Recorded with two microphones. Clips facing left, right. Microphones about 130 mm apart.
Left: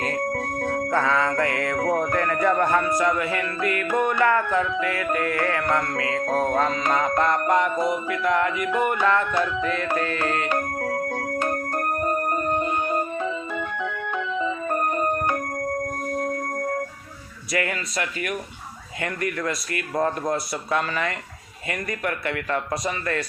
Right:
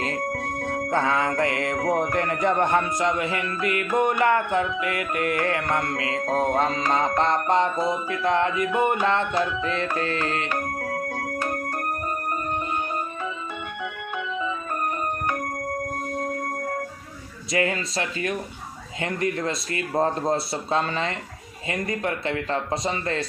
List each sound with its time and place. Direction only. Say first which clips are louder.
0.9 s speech: even; 25° right (ahead or behind)
17.5 s speech: right 2 dB; 25° right (ahead or behind)